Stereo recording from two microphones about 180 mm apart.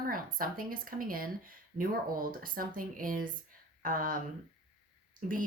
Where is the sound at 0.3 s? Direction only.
50° right (ahead or behind).